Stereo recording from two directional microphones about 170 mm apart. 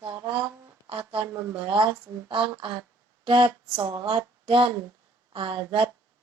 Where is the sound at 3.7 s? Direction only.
30° right (ahead or behind).